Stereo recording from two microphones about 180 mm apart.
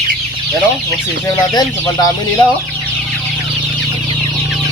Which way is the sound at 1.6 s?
20° left (ahead or behind).